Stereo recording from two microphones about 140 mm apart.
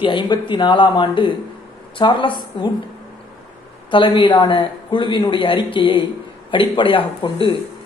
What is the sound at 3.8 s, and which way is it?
A man's voice, 35° left (ahead or behind).